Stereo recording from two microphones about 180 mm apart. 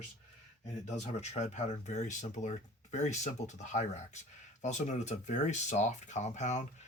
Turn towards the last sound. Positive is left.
turn(degrees=40)  # may be behind; listen again after turning